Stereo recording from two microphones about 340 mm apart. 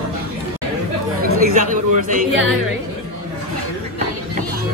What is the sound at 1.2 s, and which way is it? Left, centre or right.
Speech, right.